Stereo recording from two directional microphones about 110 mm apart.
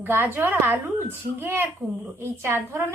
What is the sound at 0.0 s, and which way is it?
A woman's voice, 20° right (ahead or behind).